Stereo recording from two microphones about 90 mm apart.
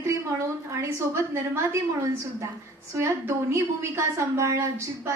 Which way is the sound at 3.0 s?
30° right (ahead or behind).